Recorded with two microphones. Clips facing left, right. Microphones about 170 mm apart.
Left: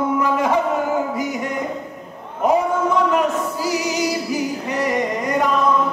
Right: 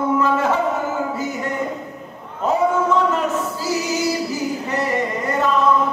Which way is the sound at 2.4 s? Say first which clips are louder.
Even; 15° left (ahead or behind).